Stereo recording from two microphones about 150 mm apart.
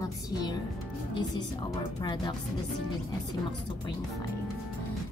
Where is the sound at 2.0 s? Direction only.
25° left (ahead or behind).